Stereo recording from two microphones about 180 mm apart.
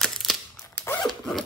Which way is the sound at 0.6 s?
15° left (ahead or behind).